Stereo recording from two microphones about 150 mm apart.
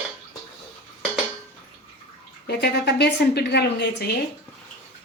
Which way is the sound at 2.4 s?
90° left.